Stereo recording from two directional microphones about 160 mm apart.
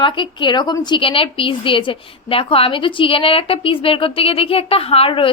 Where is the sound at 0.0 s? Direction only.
30° left (ahead or behind).